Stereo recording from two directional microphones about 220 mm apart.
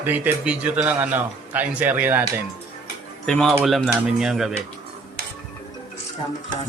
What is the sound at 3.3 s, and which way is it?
A man's voice, 5° left (ahead or behind).